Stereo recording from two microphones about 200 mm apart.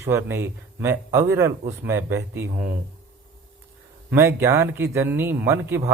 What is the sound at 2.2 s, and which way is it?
Speech, 45° right (ahead or behind).